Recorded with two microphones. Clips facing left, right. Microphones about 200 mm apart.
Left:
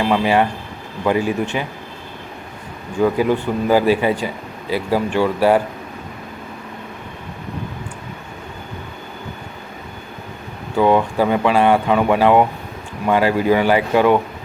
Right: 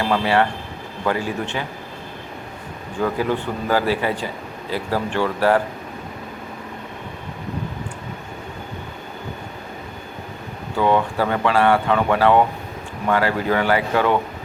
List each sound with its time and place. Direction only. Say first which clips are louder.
0.0 s speech: left 3 dB; 15° left (ahead or behind)
3.0 s speech: left 5 dB; 15° left (ahead or behind)
10.8 s speech: left 4 dB; 15° left (ahead or behind)